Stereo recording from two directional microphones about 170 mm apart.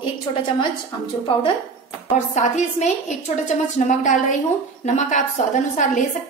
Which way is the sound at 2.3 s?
45° left (ahead or behind).